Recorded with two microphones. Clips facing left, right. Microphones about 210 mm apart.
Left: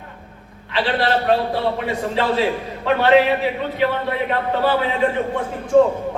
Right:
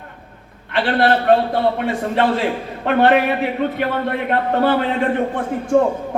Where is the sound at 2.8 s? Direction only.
50° right (ahead or behind).